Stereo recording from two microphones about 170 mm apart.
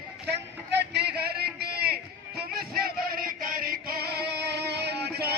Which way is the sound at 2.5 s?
60° right (ahead or behind).